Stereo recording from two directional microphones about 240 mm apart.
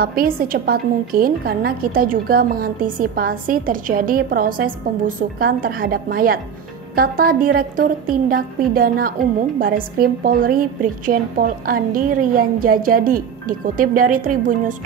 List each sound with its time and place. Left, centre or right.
0.0 s a woman's voice: right